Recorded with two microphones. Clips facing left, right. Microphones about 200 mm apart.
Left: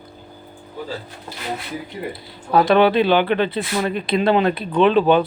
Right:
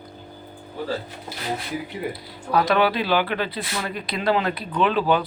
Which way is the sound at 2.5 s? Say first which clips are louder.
Left 5 dB; 25° left (ahead or behind).